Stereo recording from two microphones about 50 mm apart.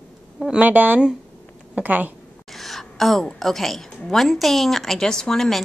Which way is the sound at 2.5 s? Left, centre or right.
Centre.